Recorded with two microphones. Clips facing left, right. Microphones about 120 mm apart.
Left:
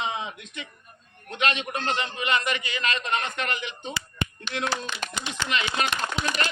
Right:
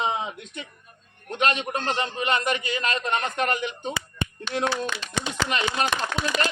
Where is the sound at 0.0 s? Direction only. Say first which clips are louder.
Right 4 dB; 40° right (ahead or behind).